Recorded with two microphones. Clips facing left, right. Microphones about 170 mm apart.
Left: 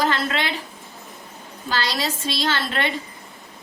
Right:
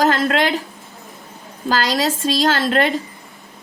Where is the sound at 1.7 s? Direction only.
45° right (ahead or behind).